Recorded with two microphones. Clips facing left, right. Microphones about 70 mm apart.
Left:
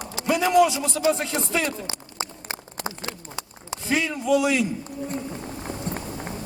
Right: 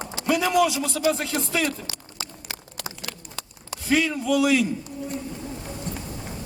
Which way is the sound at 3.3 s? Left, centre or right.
Centre.